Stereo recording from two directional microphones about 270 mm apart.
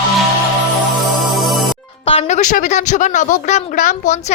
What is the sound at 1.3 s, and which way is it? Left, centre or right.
Music, centre.